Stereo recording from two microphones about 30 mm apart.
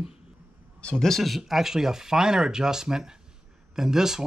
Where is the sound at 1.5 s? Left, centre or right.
Centre.